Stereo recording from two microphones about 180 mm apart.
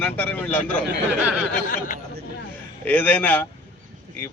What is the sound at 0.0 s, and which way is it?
Speech, 10° left (ahead or behind).